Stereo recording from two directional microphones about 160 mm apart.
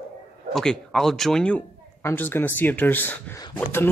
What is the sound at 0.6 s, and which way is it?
A man's voice, 5° left (ahead or behind).